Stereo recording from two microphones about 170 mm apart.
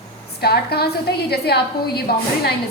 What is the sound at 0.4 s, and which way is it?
A woman's voice, 70° left (ahead or behind).